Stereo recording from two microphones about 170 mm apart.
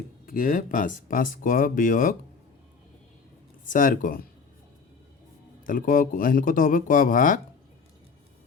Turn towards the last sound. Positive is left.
turn(degrees=50)  # may be behind; listen again after turning